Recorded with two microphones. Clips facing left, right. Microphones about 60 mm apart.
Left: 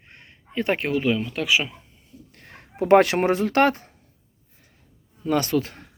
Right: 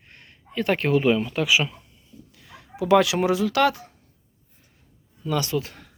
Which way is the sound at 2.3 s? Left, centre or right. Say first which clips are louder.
Right 1 dB; left.